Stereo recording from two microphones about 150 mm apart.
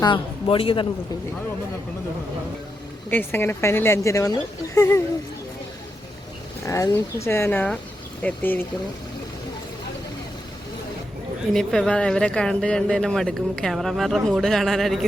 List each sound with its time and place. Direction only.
0.0 s speech: 35° left (ahead or behind)
3.1 s a woman's voice: 15° left (ahead or behind)
6.7 s a woman's voice: 20° left (ahead or behind)
11.5 s speech: 5° left (ahead or behind)